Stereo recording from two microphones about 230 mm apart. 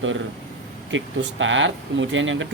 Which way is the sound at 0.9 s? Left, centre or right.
Right.